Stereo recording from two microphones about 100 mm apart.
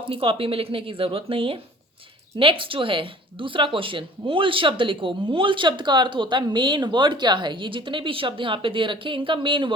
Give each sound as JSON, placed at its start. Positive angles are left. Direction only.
{"t": 0.1, "sound": "speech", "side_deg": -65}